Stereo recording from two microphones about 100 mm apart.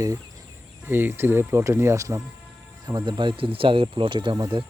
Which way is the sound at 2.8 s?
45° right (ahead or behind).